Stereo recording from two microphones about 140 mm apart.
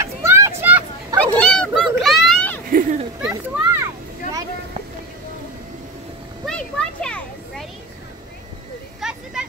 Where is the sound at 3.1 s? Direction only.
5° right (ahead or behind).